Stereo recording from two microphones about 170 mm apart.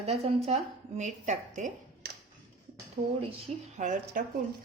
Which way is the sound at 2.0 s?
60° right (ahead or behind).